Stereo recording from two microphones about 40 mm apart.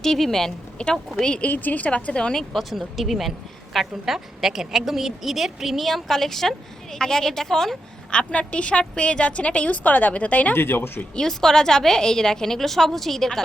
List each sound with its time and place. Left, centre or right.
0.0 s a woman's voice: centre
0.8 s a woman's voice: left
1.4 s a woman's voice: left
2.3 s a woman's voice: centre
8.1 s a woman's voice: left
10.5 s speech: left
11.1 s a woman's voice: centre